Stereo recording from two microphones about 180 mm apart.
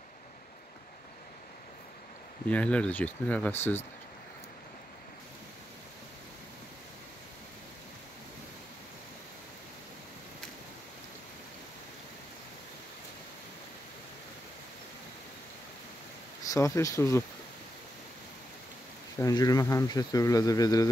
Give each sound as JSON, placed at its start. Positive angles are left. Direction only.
{"t": 2.4, "sound": "speech", "side_deg": 5}
{"t": 16.4, "sound": "speech", "side_deg": 15}
{"t": 19.1, "sound": "speech", "side_deg": 20}